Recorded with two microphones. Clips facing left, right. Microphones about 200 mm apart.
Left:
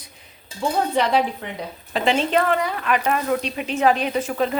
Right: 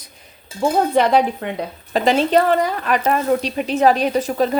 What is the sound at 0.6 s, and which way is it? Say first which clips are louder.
Speech: right 5 dB; 50° right (ahead or behind).